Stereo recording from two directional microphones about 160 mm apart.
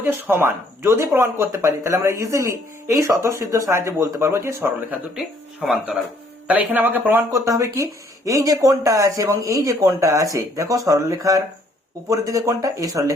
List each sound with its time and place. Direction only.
0.0 s speech: 15° right (ahead or behind)
5.1 s speech: 5° right (ahead or behind); by 13.1 s 20° right (ahead or behind)